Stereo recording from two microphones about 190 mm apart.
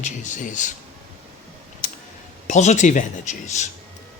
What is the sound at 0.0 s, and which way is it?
Speech, 40° left (ahead or behind).